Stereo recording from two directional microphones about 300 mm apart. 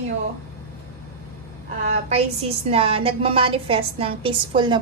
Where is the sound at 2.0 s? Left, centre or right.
Right.